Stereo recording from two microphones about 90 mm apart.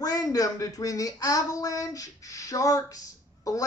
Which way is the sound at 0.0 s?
45° left (ahead or behind).